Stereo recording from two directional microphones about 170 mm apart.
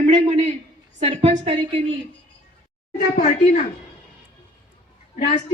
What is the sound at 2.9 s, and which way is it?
Speech, 45° left (ahead or behind).